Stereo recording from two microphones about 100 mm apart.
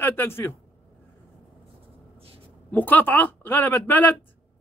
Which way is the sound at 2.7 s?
15° left (ahead or behind).